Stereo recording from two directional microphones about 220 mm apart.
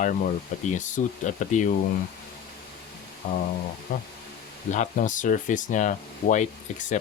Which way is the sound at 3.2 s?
30° left (ahead or behind).